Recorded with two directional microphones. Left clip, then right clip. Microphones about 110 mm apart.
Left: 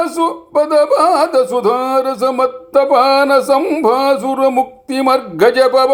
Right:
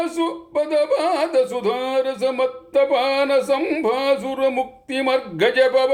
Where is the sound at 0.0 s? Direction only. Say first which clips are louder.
Left 7 dB; 40° left (ahead or behind).